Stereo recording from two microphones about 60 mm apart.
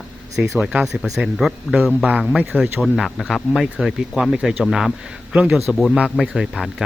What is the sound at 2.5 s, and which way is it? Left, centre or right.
Speech, right.